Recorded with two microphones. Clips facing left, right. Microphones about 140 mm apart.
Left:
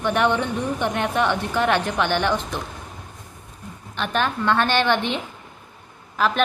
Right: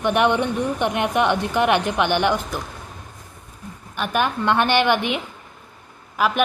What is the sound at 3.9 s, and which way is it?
A woman's voice, 10° right (ahead or behind).